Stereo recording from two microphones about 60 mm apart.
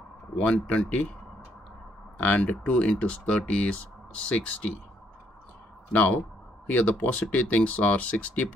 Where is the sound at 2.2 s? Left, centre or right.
Left.